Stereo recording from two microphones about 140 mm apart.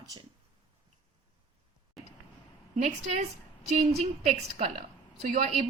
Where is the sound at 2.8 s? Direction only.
55° right (ahead or behind).